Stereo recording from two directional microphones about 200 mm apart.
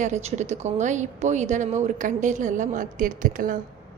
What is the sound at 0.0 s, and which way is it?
A woman's voice, 35° right (ahead or behind).